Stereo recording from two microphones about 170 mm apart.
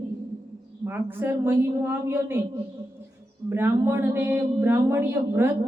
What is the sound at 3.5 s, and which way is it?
Speech, 15° right (ahead or behind).